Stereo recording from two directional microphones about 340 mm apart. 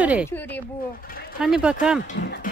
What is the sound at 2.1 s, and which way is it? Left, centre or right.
Speech, left.